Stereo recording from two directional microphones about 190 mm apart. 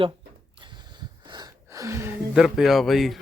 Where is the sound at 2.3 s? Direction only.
Centre (ahead or behind).